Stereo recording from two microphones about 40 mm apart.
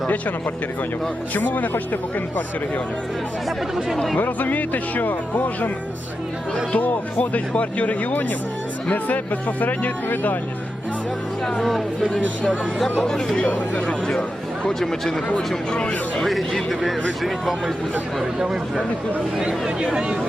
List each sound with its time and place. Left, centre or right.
1.3 s speech: left
3.9 s speech: centre
4.2 s speech: left
6.7 s speech: left
13.0 s speech: centre
13.5 s speech: left
14.2 s speech: centre
14.8 s speech: centre
16.2 s speech: centre
18.2 s speech: centre